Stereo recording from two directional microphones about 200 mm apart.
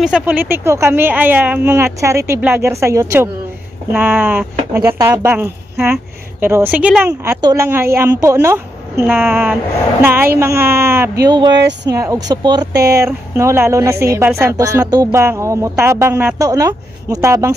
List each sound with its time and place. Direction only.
0.0 s speech: 5° right (ahead or behind)
11.5 s speech: 60° right (ahead or behind)
11.9 s speech: 15° right (ahead or behind)
12.7 s speech: 50° right (ahead or behind)
13.0 s speech: 15° right (ahead or behind)